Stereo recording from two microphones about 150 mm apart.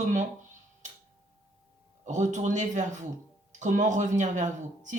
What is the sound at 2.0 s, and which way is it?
Speech, 55° right (ahead or behind).